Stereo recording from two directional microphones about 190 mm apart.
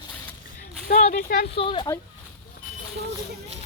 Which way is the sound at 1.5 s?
30° left (ahead or behind).